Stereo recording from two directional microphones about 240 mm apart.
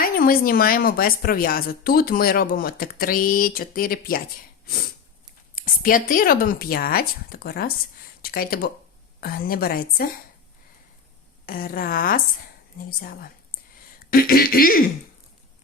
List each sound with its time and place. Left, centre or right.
0.0 s a woman's voice: left
5.5 s a woman's voice: left
11.4 s a woman's voice: left